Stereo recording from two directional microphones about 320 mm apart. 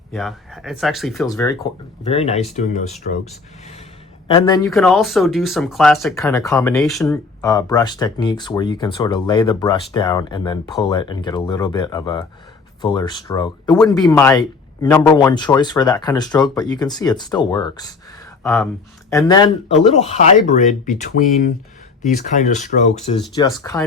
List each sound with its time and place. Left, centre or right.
0.1 s speech: centre; by 3.0 s left
4.3 s speech: centre
4.7 s speech: centre
18.4 s speech: centre
19.1 s speech: centre
22.0 s speech: left